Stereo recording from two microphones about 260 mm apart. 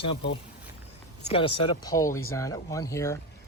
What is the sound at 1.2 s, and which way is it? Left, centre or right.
Speech, left.